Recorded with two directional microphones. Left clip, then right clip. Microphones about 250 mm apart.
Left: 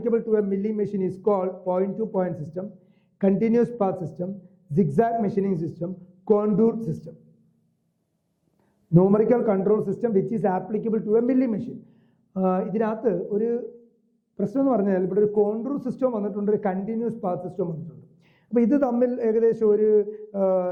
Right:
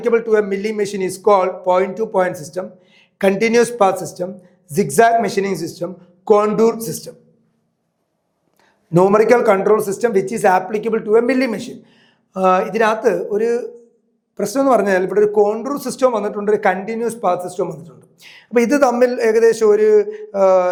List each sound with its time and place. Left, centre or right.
0.0 s a man's voice: centre
8.9 s a man's voice: centre
13.0 s a man's voice: centre
17.6 s a man's voice: centre
17.8 s a sound: centre
18.8 s a man's voice: centre
19.0 s a man's voice: centre